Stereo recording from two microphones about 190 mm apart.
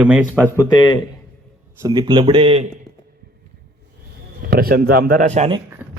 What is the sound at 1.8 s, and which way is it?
Speech, 20° right (ahead or behind).